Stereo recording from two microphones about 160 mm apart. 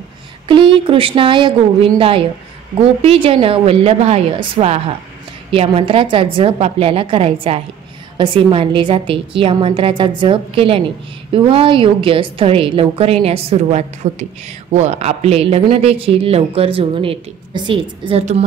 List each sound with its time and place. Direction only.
0.5 s a woman's voice: 30° right (ahead or behind)